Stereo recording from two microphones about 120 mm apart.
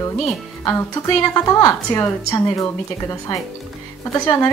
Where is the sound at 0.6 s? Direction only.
25° left (ahead or behind).